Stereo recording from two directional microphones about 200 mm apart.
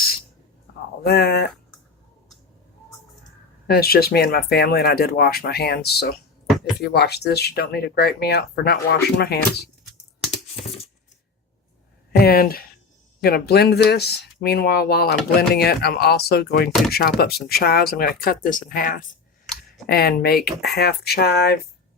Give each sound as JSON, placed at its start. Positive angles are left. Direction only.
{"t": 1.0, "sound": "speech", "side_deg": 50}
{"t": 3.7, "sound": "speech", "side_deg": 50}
{"t": 12.1, "sound": "speech", "side_deg": 50}